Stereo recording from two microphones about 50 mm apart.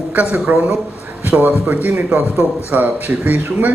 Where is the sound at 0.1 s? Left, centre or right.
Right.